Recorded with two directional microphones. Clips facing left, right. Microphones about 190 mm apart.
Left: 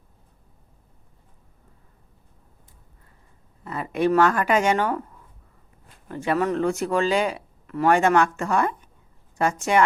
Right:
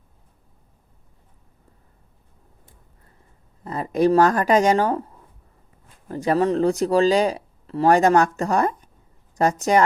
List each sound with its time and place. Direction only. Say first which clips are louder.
3.6 s speech: right 4 dB; 35° right (ahead or behind)
6.1 s speech: right 3 dB; 35° right (ahead or behind)